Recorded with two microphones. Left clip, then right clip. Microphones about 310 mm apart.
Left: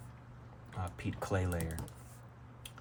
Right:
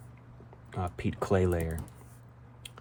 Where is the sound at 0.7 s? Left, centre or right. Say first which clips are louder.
Right 7 dB; right.